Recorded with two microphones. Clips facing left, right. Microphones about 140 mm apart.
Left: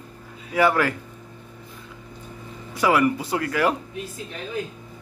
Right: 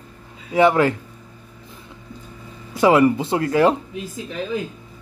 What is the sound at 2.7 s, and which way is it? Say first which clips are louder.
Speech: right 5 dB; 25° right (ahead or behind).